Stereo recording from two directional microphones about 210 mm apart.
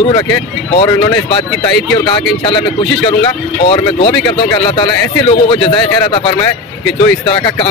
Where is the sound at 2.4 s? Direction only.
25° left (ahead or behind).